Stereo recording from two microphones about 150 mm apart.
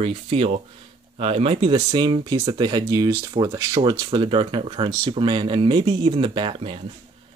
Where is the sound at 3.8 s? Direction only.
35° right (ahead or behind).